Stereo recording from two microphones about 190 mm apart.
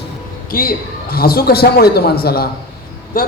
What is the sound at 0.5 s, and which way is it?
A man's voice, 50° left (ahead or behind).